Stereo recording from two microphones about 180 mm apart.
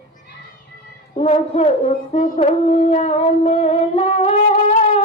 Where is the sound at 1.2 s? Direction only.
35° left (ahead or behind).